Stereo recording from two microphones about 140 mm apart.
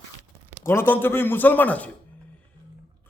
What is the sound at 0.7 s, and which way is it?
A man's voice, 15° left (ahead or behind).